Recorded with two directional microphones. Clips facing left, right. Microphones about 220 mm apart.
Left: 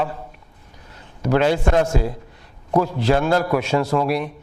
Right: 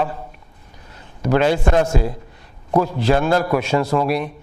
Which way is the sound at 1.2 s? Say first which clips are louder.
Right 1 dB; 15° right (ahead or behind).